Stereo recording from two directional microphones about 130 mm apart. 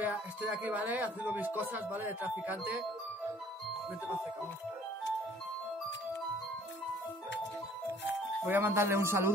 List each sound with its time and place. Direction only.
0.0 s speech: 15° right (ahead or behind)
8.5 s speech: 15° right (ahead or behind)